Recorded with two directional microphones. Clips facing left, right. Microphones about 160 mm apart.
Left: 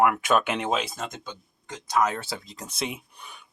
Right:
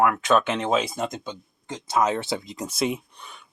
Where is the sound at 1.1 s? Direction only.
20° right (ahead or behind).